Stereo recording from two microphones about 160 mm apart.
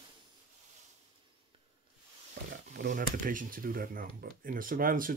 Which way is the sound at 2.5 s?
70° right (ahead or behind).